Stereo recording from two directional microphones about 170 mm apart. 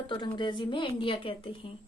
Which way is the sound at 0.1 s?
30° left (ahead or behind).